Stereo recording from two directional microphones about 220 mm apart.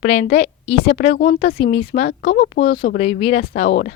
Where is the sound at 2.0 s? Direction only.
45° left (ahead or behind).